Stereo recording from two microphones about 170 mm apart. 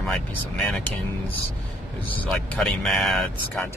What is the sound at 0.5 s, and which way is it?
Speech, 5° left (ahead or behind).